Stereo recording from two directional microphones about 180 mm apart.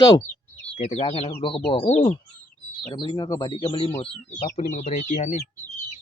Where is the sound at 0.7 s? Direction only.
35° left (ahead or behind).